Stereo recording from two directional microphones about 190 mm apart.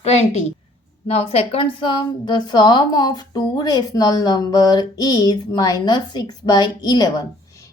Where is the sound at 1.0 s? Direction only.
30° left (ahead or behind).